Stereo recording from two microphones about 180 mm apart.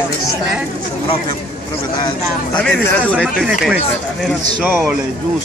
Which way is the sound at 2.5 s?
5° left (ahead or behind).